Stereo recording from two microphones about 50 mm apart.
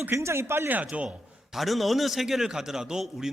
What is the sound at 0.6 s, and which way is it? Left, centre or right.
Speech, right.